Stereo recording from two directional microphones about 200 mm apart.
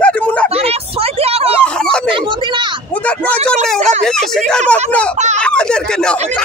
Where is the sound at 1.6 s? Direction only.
5° left (ahead or behind).